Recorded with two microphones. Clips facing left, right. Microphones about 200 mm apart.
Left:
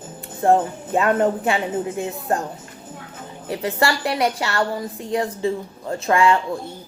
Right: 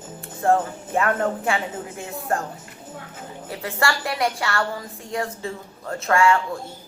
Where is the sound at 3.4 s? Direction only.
20° left (ahead or behind).